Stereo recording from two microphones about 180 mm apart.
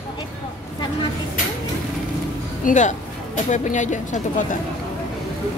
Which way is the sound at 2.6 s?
45° left (ahead or behind).